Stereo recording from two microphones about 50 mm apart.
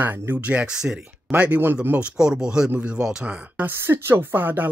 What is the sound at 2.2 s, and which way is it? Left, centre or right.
Speech, centre.